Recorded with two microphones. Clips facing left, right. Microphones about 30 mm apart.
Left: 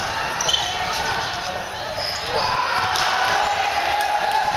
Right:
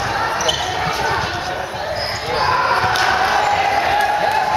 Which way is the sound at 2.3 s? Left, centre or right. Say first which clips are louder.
Right 5 dB; right.